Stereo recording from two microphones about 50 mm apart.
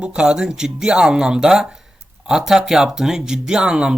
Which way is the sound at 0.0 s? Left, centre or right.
Centre.